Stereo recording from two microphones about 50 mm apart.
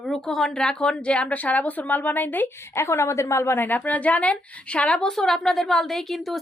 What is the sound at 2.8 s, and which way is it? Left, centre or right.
Speech, left.